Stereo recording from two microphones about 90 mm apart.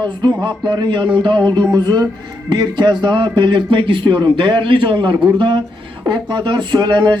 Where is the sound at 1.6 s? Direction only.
45° right (ahead or behind).